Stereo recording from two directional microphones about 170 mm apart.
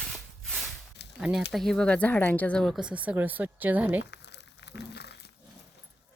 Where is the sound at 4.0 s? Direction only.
90° left; by 5.3 s 75° left (ahead or behind).